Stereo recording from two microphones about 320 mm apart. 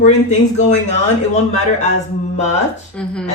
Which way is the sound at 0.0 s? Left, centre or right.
Left.